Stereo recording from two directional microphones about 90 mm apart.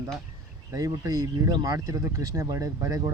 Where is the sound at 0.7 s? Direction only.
40° right (ahead or behind).